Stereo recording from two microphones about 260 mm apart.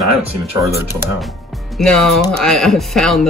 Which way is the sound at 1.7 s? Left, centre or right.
Centre.